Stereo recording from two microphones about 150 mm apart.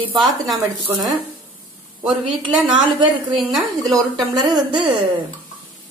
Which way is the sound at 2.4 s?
35° right (ahead or behind).